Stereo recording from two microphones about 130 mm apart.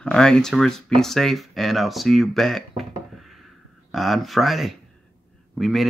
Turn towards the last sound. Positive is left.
turn(degrees=0)  # may be behind; listen again after turning